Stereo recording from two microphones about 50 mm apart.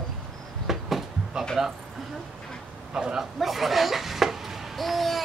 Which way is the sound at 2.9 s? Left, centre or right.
Centre.